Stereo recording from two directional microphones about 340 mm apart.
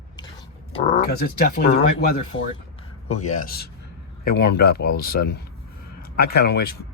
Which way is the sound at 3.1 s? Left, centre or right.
Left.